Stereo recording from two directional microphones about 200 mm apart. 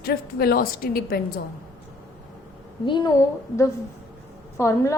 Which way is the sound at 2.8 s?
20° left (ahead or behind).